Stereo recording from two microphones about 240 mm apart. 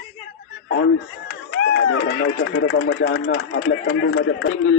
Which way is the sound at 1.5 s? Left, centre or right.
Left.